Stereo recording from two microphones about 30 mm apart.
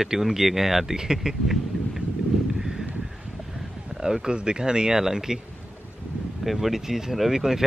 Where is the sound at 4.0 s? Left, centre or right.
Right.